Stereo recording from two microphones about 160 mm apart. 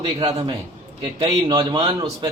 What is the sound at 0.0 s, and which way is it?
A man's voice, 25° right (ahead or behind).